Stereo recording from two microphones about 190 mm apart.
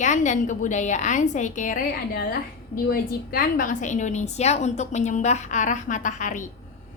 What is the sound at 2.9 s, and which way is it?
A woman's voice, 50° left (ahead or behind).